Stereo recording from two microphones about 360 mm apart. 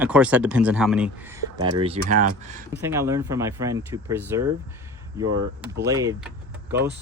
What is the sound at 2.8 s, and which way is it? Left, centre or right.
Speech, centre.